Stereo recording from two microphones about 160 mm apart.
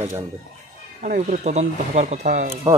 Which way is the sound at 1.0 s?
55° right (ahead or behind).